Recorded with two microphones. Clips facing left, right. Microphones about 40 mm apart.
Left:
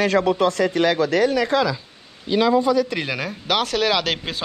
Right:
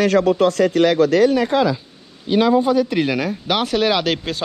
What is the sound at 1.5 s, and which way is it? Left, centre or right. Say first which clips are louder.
Speech: right 3 dB; centre.